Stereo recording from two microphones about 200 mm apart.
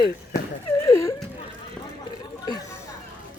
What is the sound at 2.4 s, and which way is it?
Chatter, 20° left (ahead or behind).